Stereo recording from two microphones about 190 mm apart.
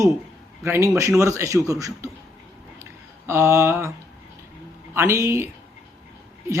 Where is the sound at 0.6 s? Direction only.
15° right (ahead or behind).